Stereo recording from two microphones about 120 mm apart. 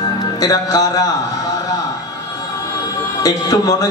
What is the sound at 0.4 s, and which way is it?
Speech, 30° left (ahead or behind).